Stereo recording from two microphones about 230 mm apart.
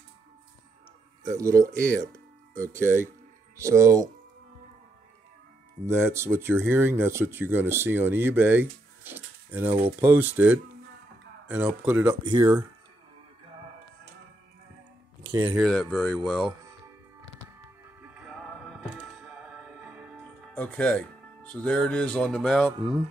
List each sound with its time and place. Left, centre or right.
1.2 s speech: centre
5.9 s speech: centre
9.7 s speech: right
9.9 s speech: centre
15.2 s speech: centre
15.7 s speech: centre
16.4 s music: centre
18.0 s music: centre
22.7 s speech: right